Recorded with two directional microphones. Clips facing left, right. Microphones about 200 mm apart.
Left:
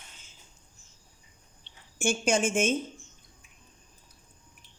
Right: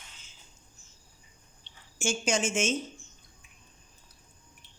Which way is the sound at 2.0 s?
55° left (ahead or behind).